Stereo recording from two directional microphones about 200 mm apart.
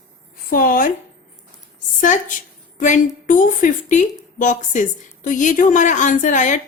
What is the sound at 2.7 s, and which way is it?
A woman's voice, 40° left (ahead or behind).